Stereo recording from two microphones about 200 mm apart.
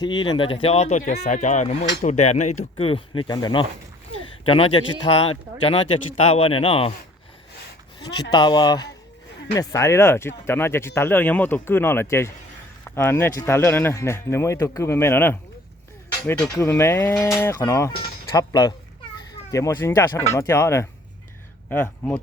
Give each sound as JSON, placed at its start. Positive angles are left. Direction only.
{"t": 0.0, "sound": "speech", "side_deg": 25}
{"t": 8.3, "sound": "speech", "side_deg": 20}